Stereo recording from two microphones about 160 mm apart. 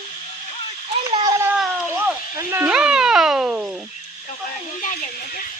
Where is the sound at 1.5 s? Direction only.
5° right (ahead or behind).